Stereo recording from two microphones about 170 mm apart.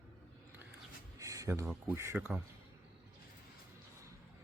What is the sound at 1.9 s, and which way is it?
Speech, 15° right (ahead or behind).